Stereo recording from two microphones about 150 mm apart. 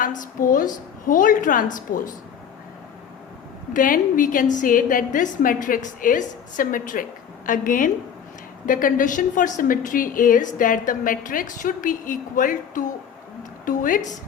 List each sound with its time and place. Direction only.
0.0 s a woman's voice: 60° left (ahead or behind)
3.7 s a woman's voice: 65° left (ahead or behind)